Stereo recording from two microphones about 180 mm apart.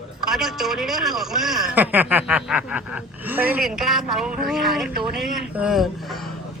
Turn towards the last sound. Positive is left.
turn(degrees=0)  # may be behind; listen again after turning